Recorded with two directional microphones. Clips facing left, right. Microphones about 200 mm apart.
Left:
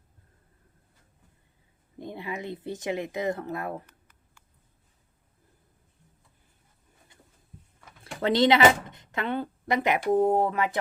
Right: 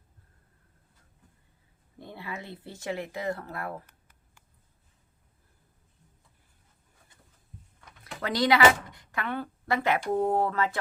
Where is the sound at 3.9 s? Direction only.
10° right (ahead or behind).